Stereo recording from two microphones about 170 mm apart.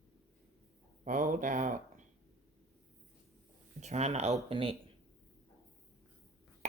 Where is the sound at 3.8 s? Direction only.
40° right (ahead or behind).